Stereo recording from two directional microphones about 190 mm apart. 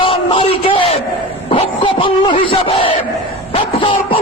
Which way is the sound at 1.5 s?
25° left (ahead or behind).